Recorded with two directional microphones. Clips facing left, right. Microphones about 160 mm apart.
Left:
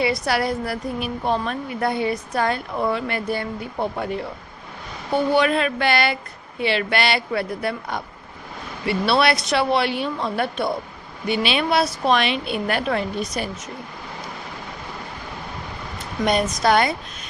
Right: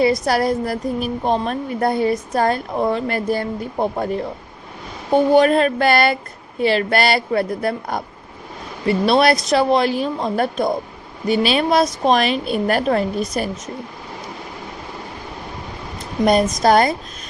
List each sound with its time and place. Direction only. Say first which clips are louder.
0.0 s a woman's voice: right 5 dB; 40° right (ahead or behind)
16.2 s speech: right 5 dB; 45° right (ahead or behind)